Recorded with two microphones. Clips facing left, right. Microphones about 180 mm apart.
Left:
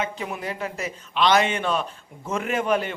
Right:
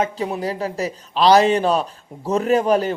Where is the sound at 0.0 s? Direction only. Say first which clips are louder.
Right 7 dB; 35° right (ahead or behind).